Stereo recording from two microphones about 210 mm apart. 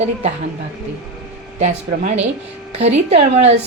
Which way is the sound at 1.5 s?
35° right (ahead or behind).